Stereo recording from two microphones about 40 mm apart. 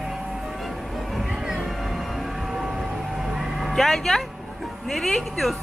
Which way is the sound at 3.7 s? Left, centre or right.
Centre.